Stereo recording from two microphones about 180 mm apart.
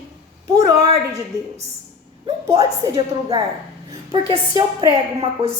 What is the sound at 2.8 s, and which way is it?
A woman's voice, 20° right (ahead or behind).